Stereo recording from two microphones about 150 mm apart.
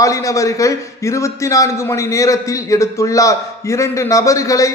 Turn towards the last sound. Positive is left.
turn(degrees=20)  # may be behind; listen again after turning